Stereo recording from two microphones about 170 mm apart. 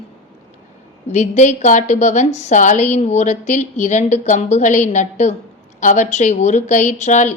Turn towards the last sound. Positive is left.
turn(degrees=45)  # may be behind; listen again after turning